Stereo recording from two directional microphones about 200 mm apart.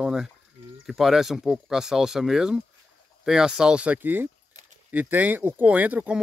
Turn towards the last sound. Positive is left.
turn(degrees=-10)  # may be behind; listen again after turning